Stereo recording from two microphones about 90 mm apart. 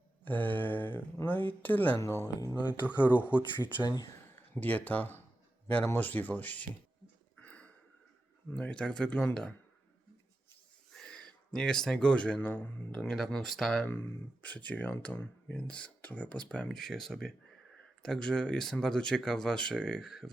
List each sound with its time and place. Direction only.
0.3 s speech: 20° left (ahead or behind)
2.0 s speech: 35° left (ahead or behind)
3.0 s speech: 15° right (ahead or behind)
4.5 s speech: 20° left (ahead or behind)
7.3 s a sound: 15° left (ahead or behind)
8.5 s speech: 15° left (ahead or behind)
10.9 s speech: 5° left (ahead or behind)
13.8 s speech: 20° left (ahead or behind); by 20.3 s centre (ahead or behind)